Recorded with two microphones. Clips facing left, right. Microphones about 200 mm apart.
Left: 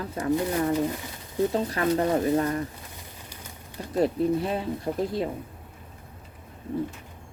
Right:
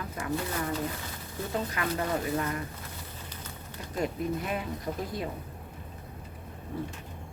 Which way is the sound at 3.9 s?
35° left (ahead or behind).